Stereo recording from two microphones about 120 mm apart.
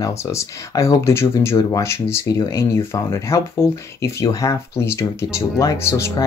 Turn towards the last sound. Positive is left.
turn(degrees=20)  # may be behind; listen again after turning